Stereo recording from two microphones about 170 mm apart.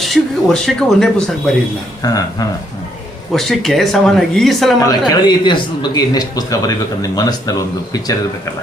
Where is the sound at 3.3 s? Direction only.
Centre (ahead or behind).